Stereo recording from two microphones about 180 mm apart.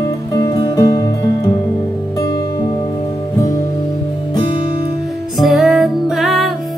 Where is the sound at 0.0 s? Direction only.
20° left (ahead or behind).